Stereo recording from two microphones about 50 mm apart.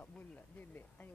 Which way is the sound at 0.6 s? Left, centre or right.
Left.